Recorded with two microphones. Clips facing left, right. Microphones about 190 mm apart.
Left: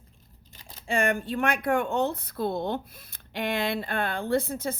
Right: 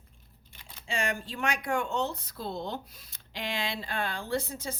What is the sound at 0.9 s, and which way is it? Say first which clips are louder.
Speech: left 7 dB; 55° left (ahead or behind).